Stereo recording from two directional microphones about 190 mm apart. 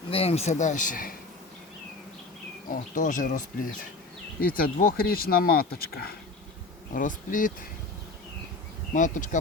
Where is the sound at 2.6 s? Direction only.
45° left (ahead or behind).